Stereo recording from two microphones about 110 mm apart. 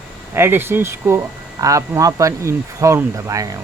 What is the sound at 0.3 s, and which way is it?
Speech, 20° right (ahead or behind).